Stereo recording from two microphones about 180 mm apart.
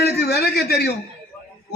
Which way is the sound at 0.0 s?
60° left (ahead or behind).